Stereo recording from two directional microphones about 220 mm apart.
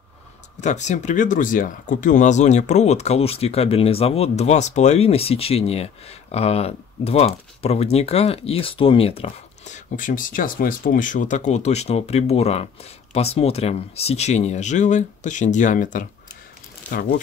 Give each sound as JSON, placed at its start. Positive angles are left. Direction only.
{"t": 0.6, "sound": "speech", "side_deg": 35}